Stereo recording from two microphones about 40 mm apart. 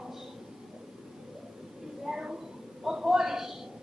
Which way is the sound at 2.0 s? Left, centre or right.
Centre.